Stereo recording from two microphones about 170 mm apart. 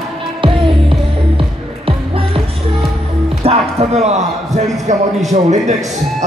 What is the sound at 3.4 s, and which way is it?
Music, 35° right (ahead or behind).